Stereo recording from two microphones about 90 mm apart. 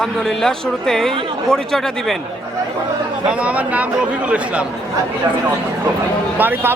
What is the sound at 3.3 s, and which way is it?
Speech, 15° right (ahead or behind).